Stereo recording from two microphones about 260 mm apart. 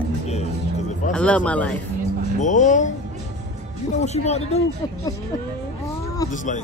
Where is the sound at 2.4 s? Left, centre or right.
Left.